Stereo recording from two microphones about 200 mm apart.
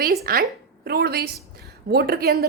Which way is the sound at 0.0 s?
50° right (ahead or behind).